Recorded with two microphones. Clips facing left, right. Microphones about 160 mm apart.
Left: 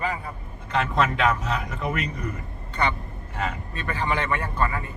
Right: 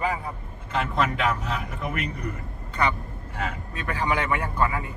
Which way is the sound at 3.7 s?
10° right (ahead or behind).